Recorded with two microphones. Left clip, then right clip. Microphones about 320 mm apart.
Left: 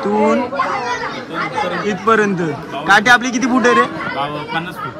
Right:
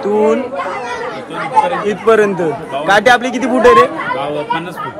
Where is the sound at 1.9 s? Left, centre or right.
Centre.